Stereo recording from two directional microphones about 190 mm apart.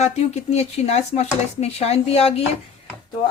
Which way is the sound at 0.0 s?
35° left (ahead or behind).